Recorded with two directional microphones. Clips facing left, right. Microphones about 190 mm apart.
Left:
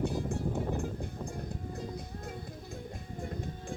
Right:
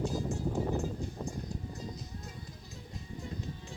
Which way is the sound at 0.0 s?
60° left (ahead or behind).